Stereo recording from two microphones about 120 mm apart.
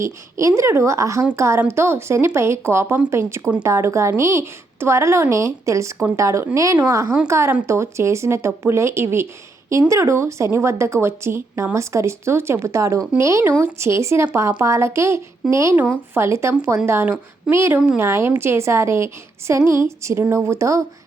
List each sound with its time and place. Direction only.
0.0 s a woman's voice: 25° right (ahead or behind)
15.7 s a woman's voice: 15° right (ahead or behind)